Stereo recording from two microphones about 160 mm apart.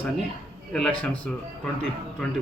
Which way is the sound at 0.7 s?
5° left (ahead or behind).